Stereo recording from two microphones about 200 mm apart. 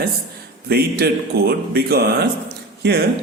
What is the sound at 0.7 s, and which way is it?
Speech, 50° right (ahead or behind).